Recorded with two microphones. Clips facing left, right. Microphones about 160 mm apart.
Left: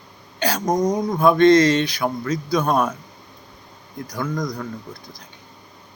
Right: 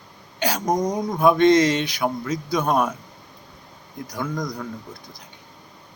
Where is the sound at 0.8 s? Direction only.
5° right (ahead or behind).